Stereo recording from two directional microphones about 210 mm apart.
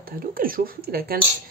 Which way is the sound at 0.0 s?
45° right (ahead or behind).